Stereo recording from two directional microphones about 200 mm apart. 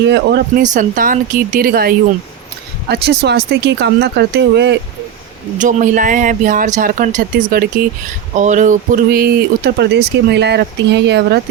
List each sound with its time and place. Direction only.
0.0 s speech: 55° right (ahead or behind)
0.6 s speech: 40° right (ahead or behind); by 4.8 s 60° right (ahead or behind)
5.5 s speech: 40° right (ahead or behind); by 11.3 s 55° right (ahead or behind)